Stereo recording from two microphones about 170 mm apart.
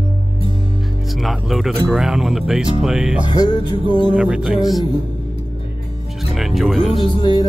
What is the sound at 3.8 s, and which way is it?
Music, 30° right (ahead or behind).